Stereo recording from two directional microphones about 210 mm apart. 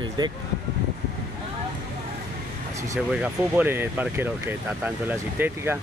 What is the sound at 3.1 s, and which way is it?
Speech, 5° right (ahead or behind).